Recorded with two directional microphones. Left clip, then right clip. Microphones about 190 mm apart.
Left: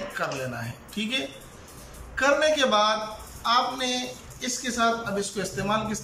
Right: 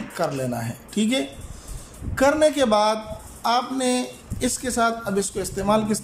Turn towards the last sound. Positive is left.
turn(degrees=-30)  # may be behind; listen again after turning